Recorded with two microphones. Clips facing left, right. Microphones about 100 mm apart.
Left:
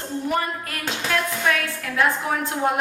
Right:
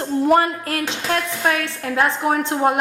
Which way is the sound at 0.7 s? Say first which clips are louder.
Right 4 dB; 35° right (ahead or behind).